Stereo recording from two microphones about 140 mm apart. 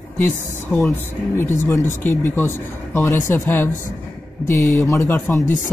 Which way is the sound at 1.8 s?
65° left (ahead or behind).